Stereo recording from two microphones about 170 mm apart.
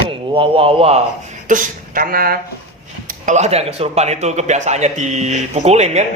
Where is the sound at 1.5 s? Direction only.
55° right (ahead or behind).